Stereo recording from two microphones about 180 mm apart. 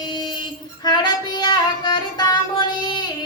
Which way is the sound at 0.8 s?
25° left (ahead or behind).